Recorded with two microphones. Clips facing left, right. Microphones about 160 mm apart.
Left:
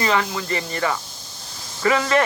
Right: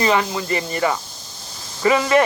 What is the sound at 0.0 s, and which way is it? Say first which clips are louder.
Speech: right 3 dB; 20° right (ahead or behind).